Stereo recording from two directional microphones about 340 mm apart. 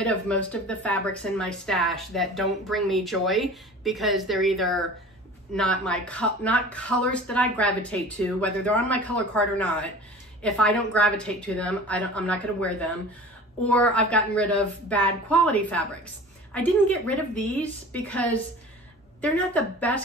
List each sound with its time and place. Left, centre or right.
0.0 s speech: centre